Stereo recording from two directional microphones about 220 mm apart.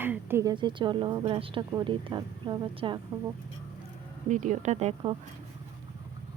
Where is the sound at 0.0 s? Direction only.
10° right (ahead or behind).